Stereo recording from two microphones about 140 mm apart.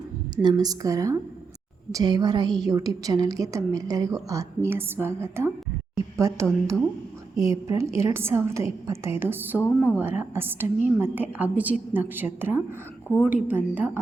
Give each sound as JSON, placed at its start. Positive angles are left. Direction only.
{"t": 0.4, "sound": "a woman's voice", "side_deg": -25}